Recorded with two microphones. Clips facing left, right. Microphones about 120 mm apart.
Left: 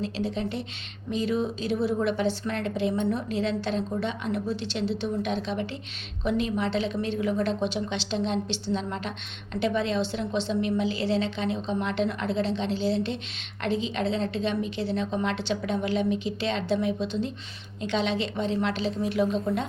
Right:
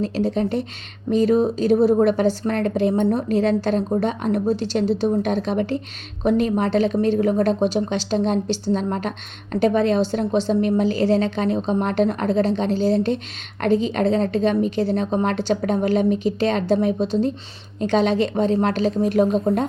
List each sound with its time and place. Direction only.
0.0 s a woman's voice: 45° right (ahead or behind)